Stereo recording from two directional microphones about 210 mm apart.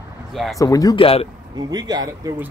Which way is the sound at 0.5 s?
15° left (ahead or behind).